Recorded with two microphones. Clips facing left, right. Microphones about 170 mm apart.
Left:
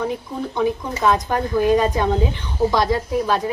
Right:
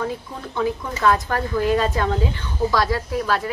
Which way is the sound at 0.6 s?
15° left (ahead or behind).